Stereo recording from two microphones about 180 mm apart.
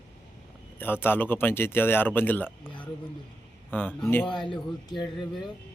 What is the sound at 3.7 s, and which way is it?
Speech, 10° left (ahead or behind).